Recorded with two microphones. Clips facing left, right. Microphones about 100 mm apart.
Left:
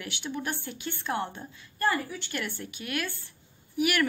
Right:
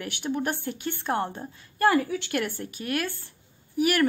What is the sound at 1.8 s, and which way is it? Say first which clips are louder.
Speech: right 6 dB; 85° right.